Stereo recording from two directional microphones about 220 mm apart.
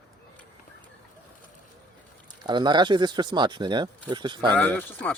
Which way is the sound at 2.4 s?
20° right (ahead or behind).